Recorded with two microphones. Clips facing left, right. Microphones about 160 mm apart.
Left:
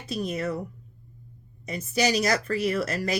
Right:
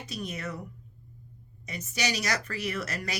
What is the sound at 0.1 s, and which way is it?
Speech, 35° left (ahead or behind).